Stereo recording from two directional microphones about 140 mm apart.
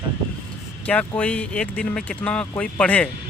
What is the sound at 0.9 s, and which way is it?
Speech, 10° left (ahead or behind).